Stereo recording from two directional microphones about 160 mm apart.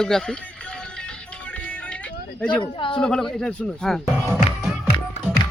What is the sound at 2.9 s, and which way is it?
A man's voice, 5° left (ahead or behind).